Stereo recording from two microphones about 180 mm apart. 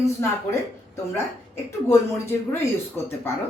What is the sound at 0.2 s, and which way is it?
Speech, 15° left (ahead or behind).